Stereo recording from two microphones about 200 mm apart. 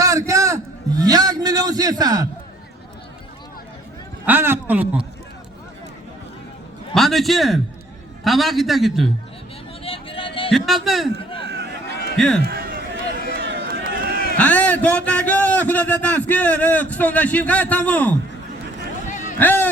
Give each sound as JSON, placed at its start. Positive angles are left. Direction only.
{"t": 0.0, "sound": "a sound", "side_deg": -15}
{"t": 4.3, "sound": "a man's voice", "side_deg": -10}
{"t": 6.9, "sound": "a man's voice", "side_deg": 0}
{"t": 9.8, "sound": "vehicle", "side_deg": 25}
{"t": 10.5, "sound": "a man's voice", "side_deg": 0}
{"t": 11.4, "sound": "a sound", "side_deg": -55}
{"t": 12.1, "sound": "a man's voice", "side_deg": 5}
{"t": 12.5, "sound": "a sound", "side_deg": -50}
{"t": 13.4, "sound": "run", "side_deg": -65}
{"t": 14.3, "sound": "a man's voice", "side_deg": 5}
{"t": 19.0, "sound": "a sound", "side_deg": 40}
{"t": 19.4, "sound": "a man's voice", "side_deg": 10}